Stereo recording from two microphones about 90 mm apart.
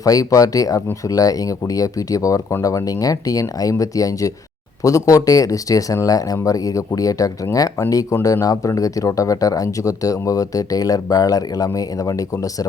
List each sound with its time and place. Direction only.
0.0 s speech: 40° left (ahead or behind)